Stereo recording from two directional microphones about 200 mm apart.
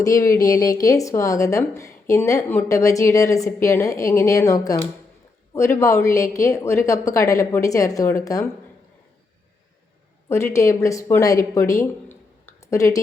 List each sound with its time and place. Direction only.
0.0 s speech: 15° left (ahead or behind)
5.8 s speech: 15° left (ahead or behind)
10.2 s speech: 15° left (ahead or behind)